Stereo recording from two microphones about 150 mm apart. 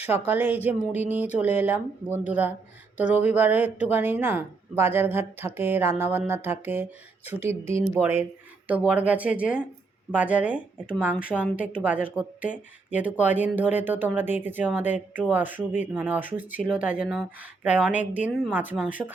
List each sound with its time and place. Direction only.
0.0 s speech: 15° right (ahead or behind)